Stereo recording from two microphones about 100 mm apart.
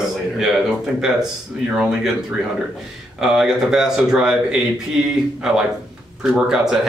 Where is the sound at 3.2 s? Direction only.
5° right (ahead or behind).